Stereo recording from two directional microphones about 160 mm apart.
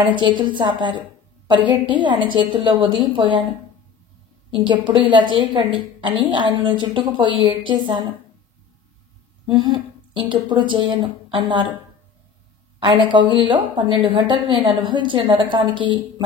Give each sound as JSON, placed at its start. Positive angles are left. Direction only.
{"t": 0.0, "sound": "a woman's voice", "side_deg": -30}
{"t": 4.5, "sound": "a woman's voice", "side_deg": -30}
{"t": 9.5, "sound": "a woman's voice", "side_deg": -30}
{"t": 12.8, "sound": "a woman's voice", "side_deg": -30}